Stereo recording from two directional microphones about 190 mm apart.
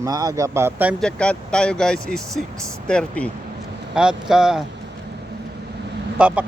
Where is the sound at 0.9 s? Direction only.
5° left (ahead or behind).